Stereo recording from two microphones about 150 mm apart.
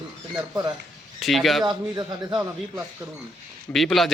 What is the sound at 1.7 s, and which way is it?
Speech, 30° right (ahead or behind).